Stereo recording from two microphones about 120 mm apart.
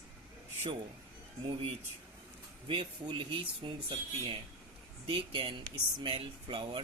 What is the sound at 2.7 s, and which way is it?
Speech, 45° right (ahead or behind).